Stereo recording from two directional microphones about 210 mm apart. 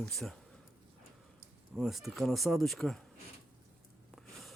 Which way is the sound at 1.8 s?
Centre (ahead or behind).